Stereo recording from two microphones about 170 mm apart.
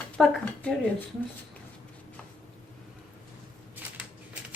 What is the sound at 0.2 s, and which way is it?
Speech, 10° left (ahead or behind).